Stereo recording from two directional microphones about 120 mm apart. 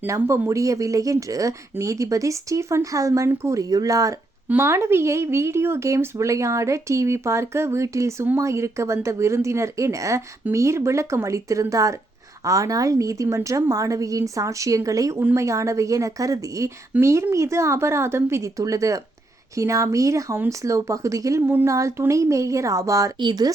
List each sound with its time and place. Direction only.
0.0 s speech: 25° right (ahead or behind)